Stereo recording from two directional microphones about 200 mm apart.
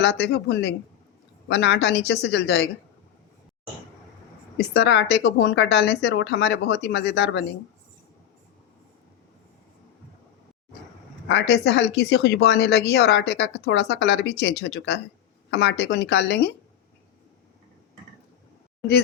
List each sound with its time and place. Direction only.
0.0 s a woman's voice: 55° left (ahead or behind)
4.5 s a woman's voice: 60° left (ahead or behind)
11.3 s a woman's voice: 60° left (ahead or behind)